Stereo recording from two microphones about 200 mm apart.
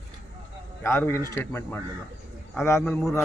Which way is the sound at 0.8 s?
10° left (ahead or behind).